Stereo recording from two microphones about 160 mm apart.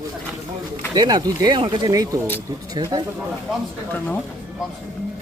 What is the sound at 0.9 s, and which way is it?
Speech, 25° right (ahead or behind).